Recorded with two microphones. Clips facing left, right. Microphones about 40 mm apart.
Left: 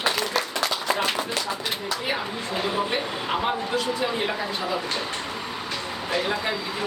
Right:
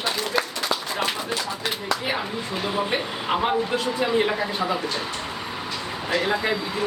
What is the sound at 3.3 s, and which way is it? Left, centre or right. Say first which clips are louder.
Speech: right 3 dB; centre.